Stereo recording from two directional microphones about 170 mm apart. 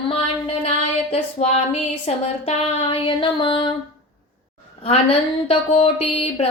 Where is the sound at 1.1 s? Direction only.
35° left (ahead or behind).